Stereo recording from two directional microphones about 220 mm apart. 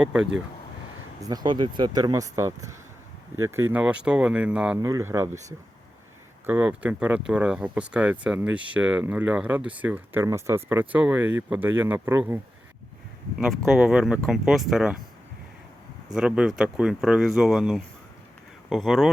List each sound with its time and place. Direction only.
0.0 s speech: 5° right (ahead or behind)
1.3 s speech: 20° right (ahead or behind)
13.7 s speech: 5° right (ahead or behind)
16.1 s speech: 5° right (ahead or behind)